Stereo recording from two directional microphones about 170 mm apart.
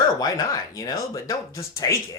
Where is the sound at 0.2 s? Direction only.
20° left (ahead or behind).